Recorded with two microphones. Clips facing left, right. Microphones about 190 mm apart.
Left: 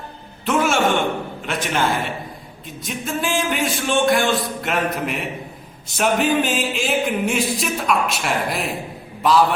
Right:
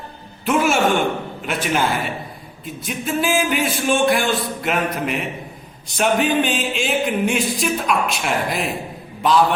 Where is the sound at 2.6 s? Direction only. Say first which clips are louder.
Right 2 dB; centre (ahead or behind).